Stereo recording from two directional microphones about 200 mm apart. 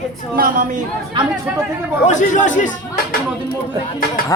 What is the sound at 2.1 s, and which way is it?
Speech, 40° left (ahead or behind).